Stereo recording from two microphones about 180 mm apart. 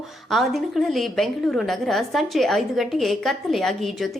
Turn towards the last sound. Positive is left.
turn(degrees=0)  # may be behind; listen again after turning